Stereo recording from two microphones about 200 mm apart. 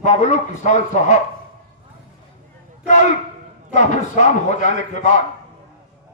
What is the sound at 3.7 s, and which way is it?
A man's voice, 40° left (ahead or behind).